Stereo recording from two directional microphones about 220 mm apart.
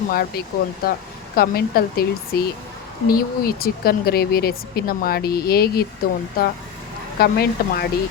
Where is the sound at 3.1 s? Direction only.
45° left (ahead or behind).